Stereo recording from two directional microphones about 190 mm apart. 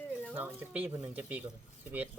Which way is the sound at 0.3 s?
10° right (ahead or behind).